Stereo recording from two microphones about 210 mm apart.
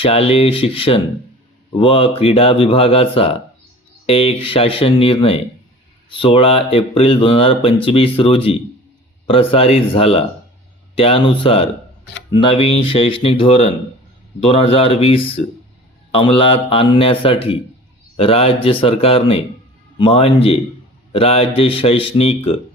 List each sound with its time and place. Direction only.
0.0 s speech: 25° left (ahead or behind)